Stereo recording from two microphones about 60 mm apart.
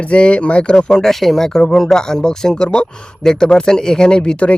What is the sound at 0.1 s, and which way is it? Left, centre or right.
Speech, centre.